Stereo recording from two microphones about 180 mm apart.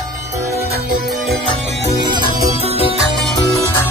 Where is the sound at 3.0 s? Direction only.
Centre (ahead or behind).